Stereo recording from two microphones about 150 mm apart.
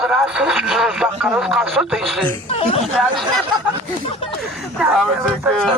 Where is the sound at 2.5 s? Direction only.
40° left (ahead or behind).